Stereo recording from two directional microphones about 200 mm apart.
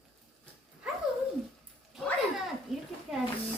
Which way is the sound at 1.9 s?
Centre (ahead or behind).